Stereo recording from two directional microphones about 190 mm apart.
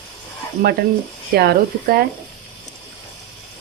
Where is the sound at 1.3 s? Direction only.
55° right (ahead or behind).